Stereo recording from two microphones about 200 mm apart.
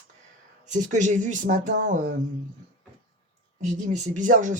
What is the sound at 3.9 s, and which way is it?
Speech, 40° right (ahead or behind).